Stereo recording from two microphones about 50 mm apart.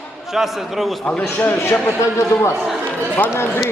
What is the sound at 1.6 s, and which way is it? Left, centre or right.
Speech, left.